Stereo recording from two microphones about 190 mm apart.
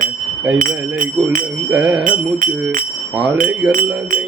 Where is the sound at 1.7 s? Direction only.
5° right (ahead or behind).